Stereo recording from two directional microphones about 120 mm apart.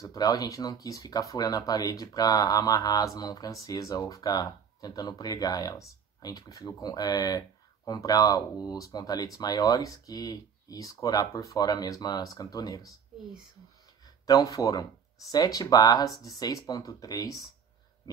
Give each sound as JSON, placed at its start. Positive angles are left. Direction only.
{"t": 0.0, "sound": "speech", "side_deg": 30}
{"t": 14.2, "sound": "speech", "side_deg": 30}